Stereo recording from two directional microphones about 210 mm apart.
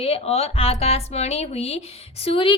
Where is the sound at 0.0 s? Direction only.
30° left (ahead or behind).